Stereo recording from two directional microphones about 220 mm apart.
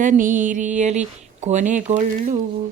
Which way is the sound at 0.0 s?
35° right (ahead or behind).